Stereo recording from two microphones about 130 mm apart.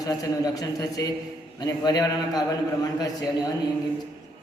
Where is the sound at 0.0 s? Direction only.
30° left (ahead or behind).